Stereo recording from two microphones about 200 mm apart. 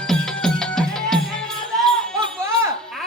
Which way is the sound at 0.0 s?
5° left (ahead or behind).